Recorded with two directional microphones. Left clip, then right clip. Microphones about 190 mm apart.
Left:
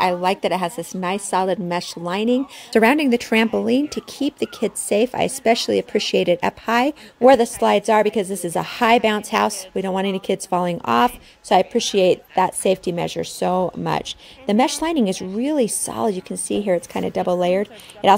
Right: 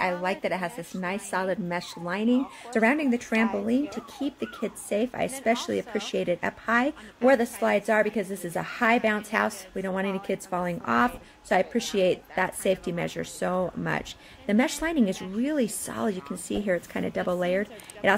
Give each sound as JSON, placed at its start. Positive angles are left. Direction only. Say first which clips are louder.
{"t": 0.0, "sound": "a woman's voice", "louder": "left 8 dB", "side_deg": 40}